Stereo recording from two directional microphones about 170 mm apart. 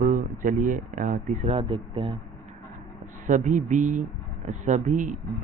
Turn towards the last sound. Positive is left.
turn(degrees=-50)  # may be behind; listen again after turning